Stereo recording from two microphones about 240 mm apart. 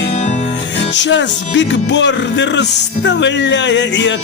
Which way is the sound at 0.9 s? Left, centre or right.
Left.